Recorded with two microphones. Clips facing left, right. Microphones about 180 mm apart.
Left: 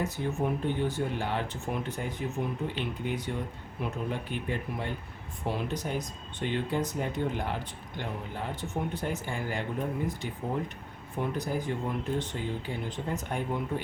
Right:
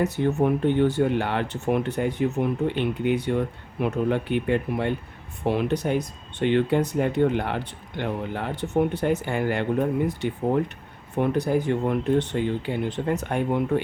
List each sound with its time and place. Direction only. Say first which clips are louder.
0.0 s speech: right 8 dB; 70° right (ahead or behind)